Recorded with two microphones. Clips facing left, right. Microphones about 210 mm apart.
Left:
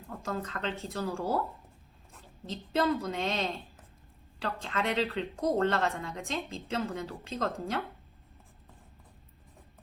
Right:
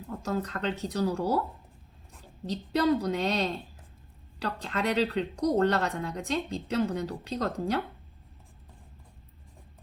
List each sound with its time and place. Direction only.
0.3 s speech: 40° right (ahead or behind)
2.5 s speech: 40° right (ahead or behind)